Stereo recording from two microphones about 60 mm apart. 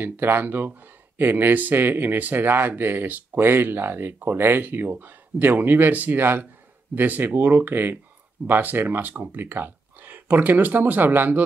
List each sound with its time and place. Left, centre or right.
0.0 s speech: right